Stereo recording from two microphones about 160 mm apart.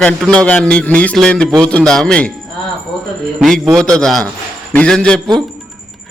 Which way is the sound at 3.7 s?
5° left (ahead or behind).